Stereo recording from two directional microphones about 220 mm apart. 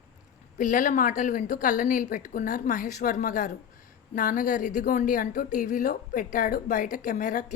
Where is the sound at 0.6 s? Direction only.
35° left (ahead or behind).